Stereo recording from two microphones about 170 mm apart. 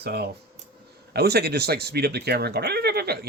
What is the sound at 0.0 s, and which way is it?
Speech, 70° right (ahead or behind).